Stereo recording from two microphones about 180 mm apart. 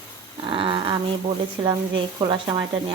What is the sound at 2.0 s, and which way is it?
Speech, 25° right (ahead or behind).